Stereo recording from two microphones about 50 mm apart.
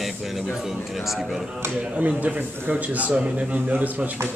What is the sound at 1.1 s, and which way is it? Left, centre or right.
Speech, centre.